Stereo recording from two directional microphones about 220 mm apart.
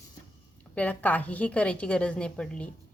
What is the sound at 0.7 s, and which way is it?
A woman's voice, 5° left (ahead or behind).